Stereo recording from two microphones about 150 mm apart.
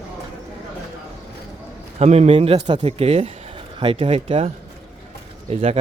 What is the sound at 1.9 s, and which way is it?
A man's voice, 45° right (ahead or behind).